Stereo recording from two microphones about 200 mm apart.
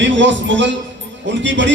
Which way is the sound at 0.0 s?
65° right (ahead or behind).